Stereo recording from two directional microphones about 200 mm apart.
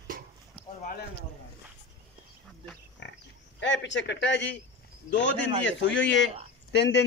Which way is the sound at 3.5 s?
65° left (ahead or behind).